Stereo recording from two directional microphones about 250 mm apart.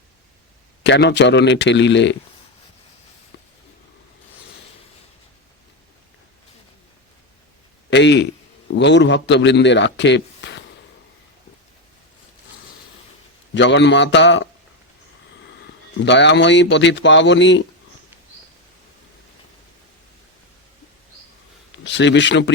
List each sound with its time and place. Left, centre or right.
0.9 s a man's voice: left
7.9 s a man's voice: left
13.5 s a man's voice: left
15.4 s speech: left
21.8 s a man's voice: left